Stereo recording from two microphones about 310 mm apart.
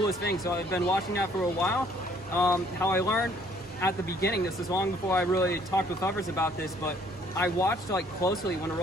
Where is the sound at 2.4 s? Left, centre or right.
Centre.